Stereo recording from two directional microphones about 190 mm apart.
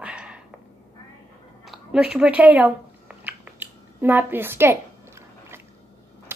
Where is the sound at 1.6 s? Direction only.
Centre (ahead or behind).